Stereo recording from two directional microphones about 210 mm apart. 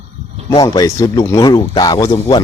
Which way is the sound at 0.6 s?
15° left (ahead or behind).